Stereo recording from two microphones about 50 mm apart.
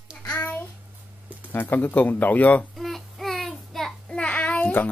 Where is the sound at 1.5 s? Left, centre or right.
Left.